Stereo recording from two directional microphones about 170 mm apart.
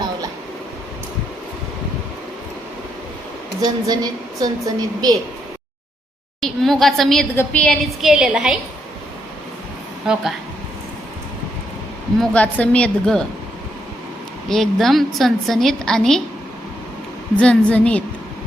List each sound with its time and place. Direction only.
3.6 s a woman's voice: 25° right (ahead or behind)
6.4 s a woman's voice: centre (ahead or behind)
12.2 s a woman's voice: 10° left (ahead or behind)
14.5 s a woman's voice: centre (ahead or behind)
17.3 s a woman's voice: 5° left (ahead or behind)